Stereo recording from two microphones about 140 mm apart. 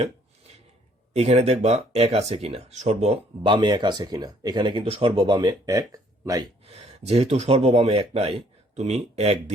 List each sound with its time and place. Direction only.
1.1 s speech: 50° right (ahead or behind); by 6.4 s 25° right (ahead or behind)
6.7 s speech: 50° right (ahead or behind)